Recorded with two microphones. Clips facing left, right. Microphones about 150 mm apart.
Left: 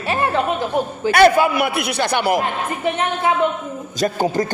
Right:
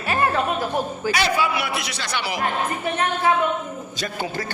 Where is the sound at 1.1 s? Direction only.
55° left (ahead or behind).